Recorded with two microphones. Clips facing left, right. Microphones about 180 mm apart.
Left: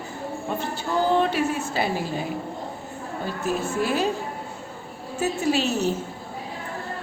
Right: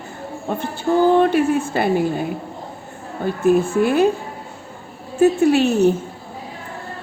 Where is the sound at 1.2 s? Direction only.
55° right (ahead or behind).